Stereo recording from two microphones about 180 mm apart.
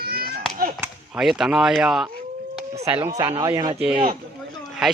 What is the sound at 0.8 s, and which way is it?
Speech, 5° right (ahead or behind).